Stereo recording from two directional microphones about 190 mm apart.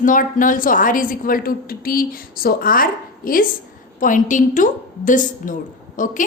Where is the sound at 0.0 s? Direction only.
45° left (ahead or behind).